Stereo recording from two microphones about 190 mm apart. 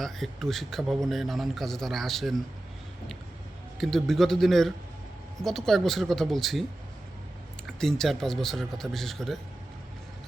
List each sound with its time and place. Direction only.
0.0 s a man's voice: centre (ahead or behind)
3.8 s a man's voice: centre (ahead or behind)
7.7 s a man's voice: centre (ahead or behind)